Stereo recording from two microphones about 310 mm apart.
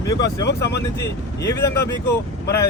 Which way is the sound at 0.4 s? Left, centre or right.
Left.